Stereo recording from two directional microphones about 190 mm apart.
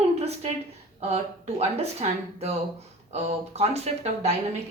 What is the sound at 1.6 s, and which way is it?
Speech, 35° right (ahead or behind).